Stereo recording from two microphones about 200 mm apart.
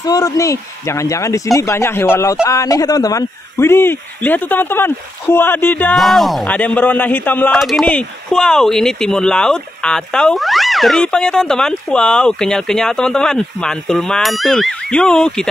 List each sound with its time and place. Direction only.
0.0 s speech: 20° left (ahead or behind)